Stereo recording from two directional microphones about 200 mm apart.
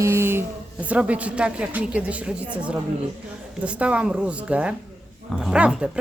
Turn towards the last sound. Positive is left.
turn(degrees=-5)  # may be behind; listen again after turning